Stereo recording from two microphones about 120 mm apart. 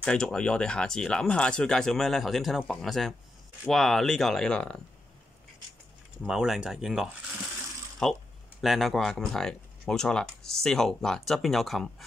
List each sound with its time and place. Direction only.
0.0 s speech: 5° left (ahead or behind)
6.2 s speech: 5° right (ahead or behind)